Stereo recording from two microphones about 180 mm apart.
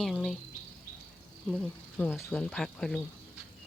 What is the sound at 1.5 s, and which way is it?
Speech, 5° left (ahead or behind).